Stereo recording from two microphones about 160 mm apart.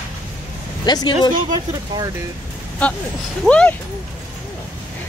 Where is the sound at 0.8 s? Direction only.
25° left (ahead or behind).